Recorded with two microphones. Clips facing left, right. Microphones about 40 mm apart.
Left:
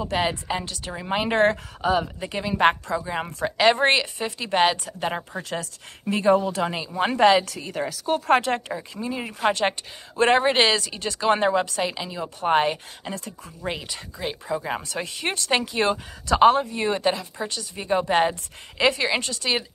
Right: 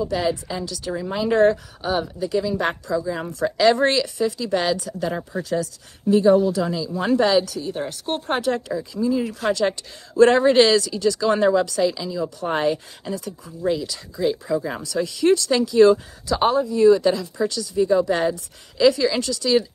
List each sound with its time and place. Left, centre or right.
0.0 s speech: left
2.2 s speech: left
3.2 s a woman's voice: left
5.4 s speech: left
6.9 s a woman's voice: left
7.2 s speech: left
8.4 s a woman's voice: left
9.2 s a woman's voice: left
10.9 s a woman's voice: left
13.7 s speech: left
14.2 s a woman's voice: left
16.3 s speech: left
17.1 s a woman's voice: left